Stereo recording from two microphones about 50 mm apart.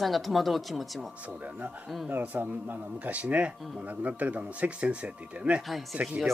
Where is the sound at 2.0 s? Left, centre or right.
Right.